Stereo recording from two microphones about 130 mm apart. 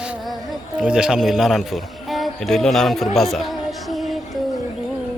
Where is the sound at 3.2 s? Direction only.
Centre (ahead or behind).